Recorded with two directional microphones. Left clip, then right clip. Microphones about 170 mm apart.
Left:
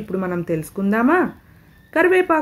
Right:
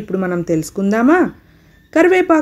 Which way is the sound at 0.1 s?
25° right (ahead or behind).